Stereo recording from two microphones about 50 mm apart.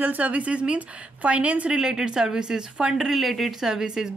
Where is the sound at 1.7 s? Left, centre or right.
Centre.